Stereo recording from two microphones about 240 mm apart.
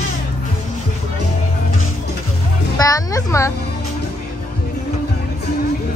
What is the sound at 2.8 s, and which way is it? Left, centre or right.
Speech, centre.